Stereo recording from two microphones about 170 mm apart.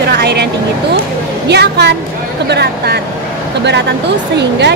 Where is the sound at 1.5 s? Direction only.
80° right.